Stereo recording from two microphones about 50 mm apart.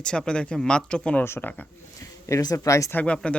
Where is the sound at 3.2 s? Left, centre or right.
Left.